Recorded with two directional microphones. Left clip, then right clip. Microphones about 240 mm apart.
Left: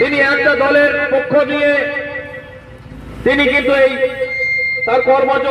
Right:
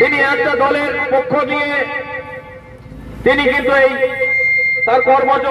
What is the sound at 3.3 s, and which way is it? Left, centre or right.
A man's voice, centre.